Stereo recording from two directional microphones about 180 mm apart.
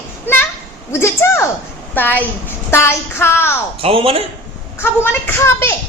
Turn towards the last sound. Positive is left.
turn(degrees=15)  # may be behind; listen again after turning